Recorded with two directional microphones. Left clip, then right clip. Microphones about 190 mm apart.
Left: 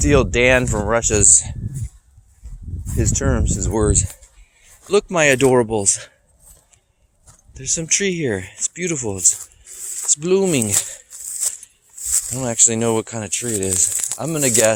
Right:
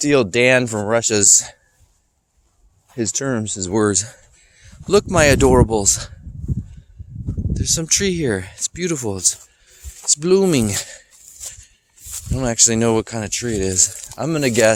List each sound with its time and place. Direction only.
0.0 s speech: 30° right (ahead or behind)
3.0 s speech: 30° right (ahead or behind)
7.9 s speech: 25° right (ahead or behind)
11.1 s a sound: 60° left (ahead or behind)
12.4 s speech: 40° right (ahead or behind)